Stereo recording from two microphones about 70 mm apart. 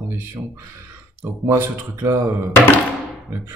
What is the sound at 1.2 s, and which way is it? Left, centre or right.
Speech, right.